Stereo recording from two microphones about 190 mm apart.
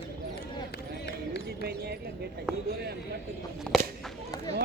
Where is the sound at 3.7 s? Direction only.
Centre (ahead or behind).